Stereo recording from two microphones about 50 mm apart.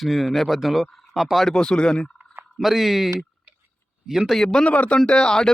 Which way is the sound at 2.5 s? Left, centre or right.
Centre.